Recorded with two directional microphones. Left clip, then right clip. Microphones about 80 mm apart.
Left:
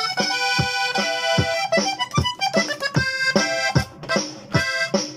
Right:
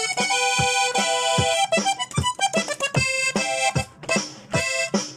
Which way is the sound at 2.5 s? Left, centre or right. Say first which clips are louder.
Left 2 dB; right.